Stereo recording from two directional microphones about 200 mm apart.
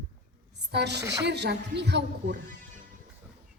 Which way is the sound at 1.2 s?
60° right (ahead or behind).